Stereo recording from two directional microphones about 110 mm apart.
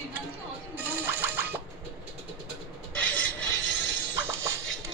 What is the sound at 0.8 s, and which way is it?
Music, 20° right (ahead or behind).